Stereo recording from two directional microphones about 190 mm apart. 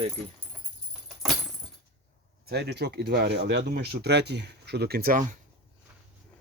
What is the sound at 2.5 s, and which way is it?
Speech, 60° right (ahead or behind).